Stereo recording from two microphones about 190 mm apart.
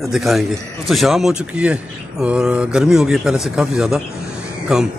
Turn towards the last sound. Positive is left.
turn(degrees=-5)  # may be behind; listen again after turning